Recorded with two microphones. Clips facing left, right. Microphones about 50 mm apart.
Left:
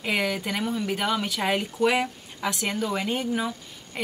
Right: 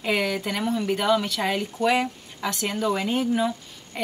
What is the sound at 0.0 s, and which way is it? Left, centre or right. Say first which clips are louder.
Speech: right 2 dB; centre.